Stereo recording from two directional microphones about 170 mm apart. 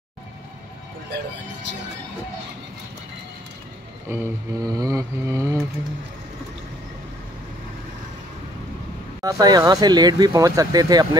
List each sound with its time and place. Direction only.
4.1 s mantra: 15° right (ahead or behind)
9.2 s speech: 20° right (ahead or behind)